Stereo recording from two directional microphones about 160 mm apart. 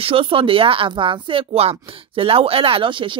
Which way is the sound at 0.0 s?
35° right (ahead or behind).